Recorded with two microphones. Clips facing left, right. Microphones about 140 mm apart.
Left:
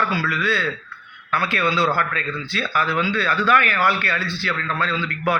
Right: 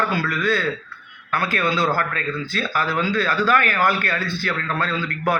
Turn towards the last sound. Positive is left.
turn(degrees=-45)  # may be behind; listen again after turning